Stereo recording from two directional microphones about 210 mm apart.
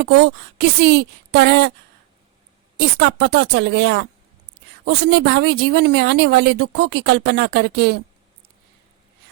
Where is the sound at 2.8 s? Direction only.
50° right (ahead or behind).